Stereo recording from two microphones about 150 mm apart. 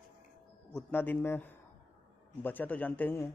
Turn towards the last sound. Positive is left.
turn(degrees=10)  # may be behind; listen again after turning